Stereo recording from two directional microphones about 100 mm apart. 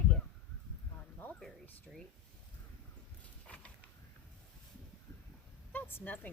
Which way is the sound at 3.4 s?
15° left (ahead or behind).